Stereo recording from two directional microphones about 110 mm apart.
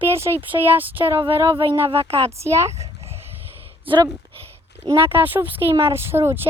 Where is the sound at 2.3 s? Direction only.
25° right (ahead or behind).